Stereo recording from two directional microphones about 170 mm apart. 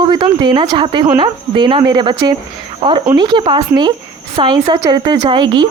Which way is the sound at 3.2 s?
30° right (ahead or behind).